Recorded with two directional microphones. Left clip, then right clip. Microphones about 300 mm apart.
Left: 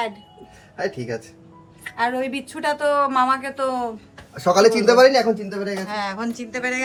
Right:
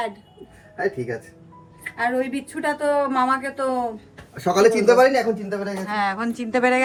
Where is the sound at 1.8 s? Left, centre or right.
Centre.